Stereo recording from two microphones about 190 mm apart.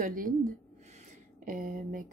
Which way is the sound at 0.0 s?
45° right (ahead or behind).